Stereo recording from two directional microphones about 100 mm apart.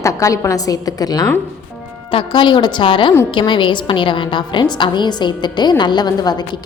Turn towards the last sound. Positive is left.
turn(degrees=45)  # may be behind; listen again after turning